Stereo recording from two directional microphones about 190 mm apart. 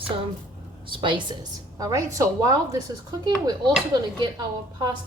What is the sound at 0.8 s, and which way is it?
A woman's voice, 25° right (ahead or behind).